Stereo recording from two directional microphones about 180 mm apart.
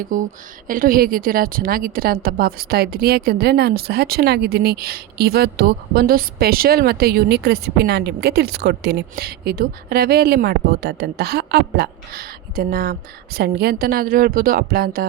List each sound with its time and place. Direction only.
0.0 s a woman's voice: 50° right (ahead or behind)